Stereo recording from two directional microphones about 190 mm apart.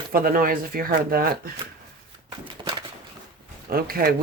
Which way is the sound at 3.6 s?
50° right (ahead or behind).